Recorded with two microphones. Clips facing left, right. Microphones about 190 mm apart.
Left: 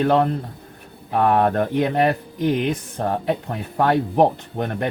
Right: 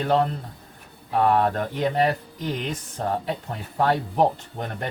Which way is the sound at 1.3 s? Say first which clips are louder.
Left 4 dB; 60° left (ahead or behind).